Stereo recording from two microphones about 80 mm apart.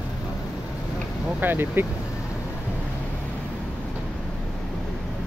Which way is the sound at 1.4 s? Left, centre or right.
Right.